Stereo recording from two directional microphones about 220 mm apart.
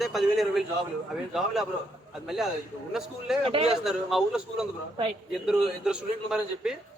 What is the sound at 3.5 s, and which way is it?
Speech, 25° right (ahead or behind).